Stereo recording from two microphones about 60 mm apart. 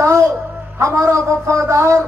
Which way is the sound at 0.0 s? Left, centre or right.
Right.